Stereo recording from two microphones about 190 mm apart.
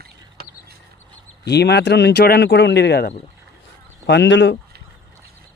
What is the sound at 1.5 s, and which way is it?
Speech, 60° left (ahead or behind).